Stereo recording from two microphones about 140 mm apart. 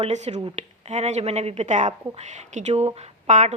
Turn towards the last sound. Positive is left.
turn(degrees=-55)  # may be behind; listen again after turning